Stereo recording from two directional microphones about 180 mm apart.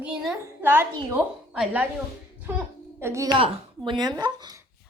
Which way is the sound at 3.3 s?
25° right (ahead or behind).